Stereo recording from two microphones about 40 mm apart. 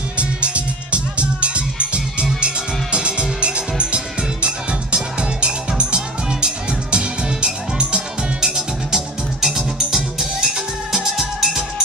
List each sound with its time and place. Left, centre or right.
0.9 s music: right; by 11.6 s centre